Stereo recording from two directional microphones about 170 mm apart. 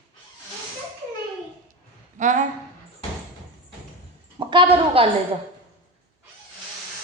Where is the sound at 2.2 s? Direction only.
45° right (ahead or behind).